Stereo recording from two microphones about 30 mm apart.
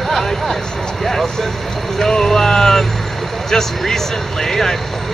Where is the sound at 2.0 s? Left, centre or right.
Left.